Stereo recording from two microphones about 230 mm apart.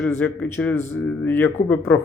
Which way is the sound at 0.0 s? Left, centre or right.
Centre.